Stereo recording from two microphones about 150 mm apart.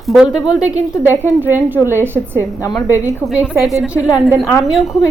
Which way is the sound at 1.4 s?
15° right (ahead or behind).